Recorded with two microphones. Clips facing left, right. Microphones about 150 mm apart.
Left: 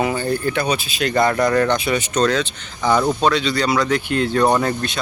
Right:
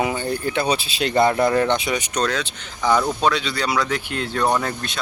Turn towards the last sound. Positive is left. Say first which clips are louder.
# left 5 dB
turn(degrees=-5)  # may be behind; listen again after turning